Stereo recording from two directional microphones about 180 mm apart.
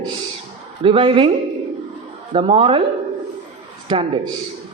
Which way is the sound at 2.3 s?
30° right (ahead or behind).